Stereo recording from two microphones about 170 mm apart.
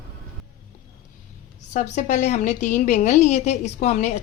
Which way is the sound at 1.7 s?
45° left (ahead or behind).